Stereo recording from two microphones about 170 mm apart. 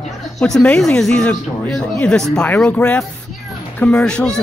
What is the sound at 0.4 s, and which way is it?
A man's voice, 5° left (ahead or behind).